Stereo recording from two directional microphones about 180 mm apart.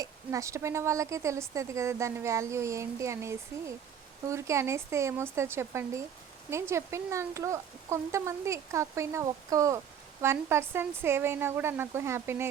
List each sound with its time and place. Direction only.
0.0 s speech: 15° right (ahead or behind)